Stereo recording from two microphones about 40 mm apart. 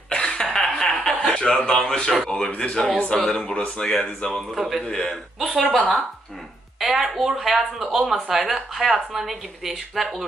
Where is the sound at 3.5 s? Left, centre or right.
Left.